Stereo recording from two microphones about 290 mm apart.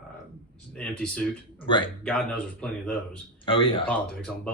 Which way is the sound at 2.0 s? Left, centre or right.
Centre.